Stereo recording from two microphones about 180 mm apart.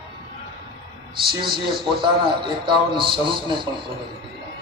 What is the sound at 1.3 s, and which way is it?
Speech, 25° right (ahead or behind).